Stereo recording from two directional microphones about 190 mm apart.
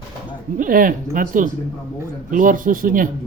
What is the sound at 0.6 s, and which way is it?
Speech, 45° right (ahead or behind).